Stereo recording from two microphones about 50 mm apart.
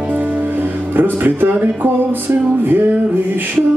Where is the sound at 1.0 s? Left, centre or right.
Right.